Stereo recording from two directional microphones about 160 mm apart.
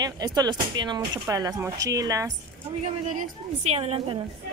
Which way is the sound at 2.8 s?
45° right (ahead or behind).